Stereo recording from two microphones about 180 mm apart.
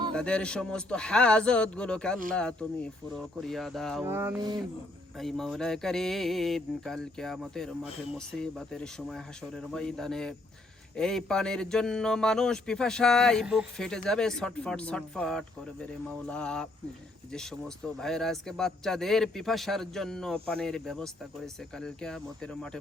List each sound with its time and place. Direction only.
0.1 s a man's voice: 5° left (ahead or behind)
4.0 s speech: 15° right (ahead or behind)
5.1 s a man's voice: centre (ahead or behind)
18.0 s a man's voice: centre (ahead or behind)